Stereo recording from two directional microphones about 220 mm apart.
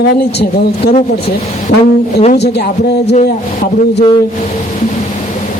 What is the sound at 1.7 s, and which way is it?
Speech, 50° left (ahead or behind).